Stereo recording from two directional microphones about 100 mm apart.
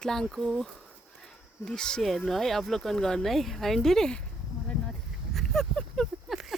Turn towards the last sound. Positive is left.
turn(degrees=5)  # may be behind; listen again after turning